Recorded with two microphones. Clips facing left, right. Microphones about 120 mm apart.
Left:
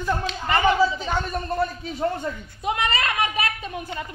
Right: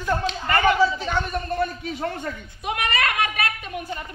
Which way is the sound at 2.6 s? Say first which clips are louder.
Left 3 dB; 30° left (ahead or behind).